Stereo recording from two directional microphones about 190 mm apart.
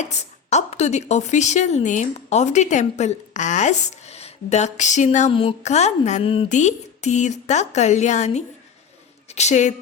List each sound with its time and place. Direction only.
0.0 s a woman's voice: 35° left (ahead or behind)